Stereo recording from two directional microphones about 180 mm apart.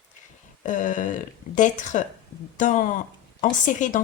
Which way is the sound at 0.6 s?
45° left (ahead or behind).